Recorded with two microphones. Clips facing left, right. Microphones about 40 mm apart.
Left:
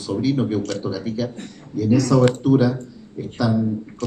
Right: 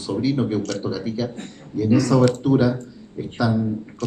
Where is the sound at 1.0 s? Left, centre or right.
Centre.